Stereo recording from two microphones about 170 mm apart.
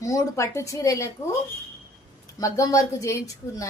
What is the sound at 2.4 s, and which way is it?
A woman's voice, 20° left (ahead or behind).